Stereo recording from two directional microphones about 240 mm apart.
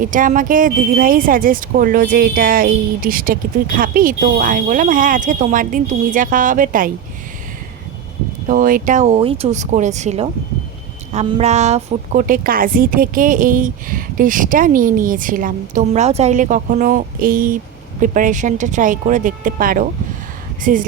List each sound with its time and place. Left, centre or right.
0.0 s speech: right
8.4 s speech: right